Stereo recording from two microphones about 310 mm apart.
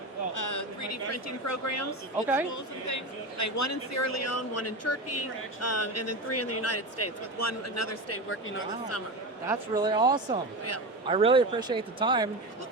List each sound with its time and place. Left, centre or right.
0.3 s a woman's voice: left
2.2 s a woman's voice: centre
2.5 s a woman's voice: left
8.3 s speech: left
9.5 s speech: centre